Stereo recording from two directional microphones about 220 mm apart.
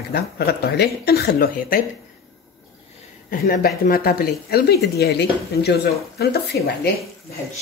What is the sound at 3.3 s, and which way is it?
Speech, 40° left (ahead or behind).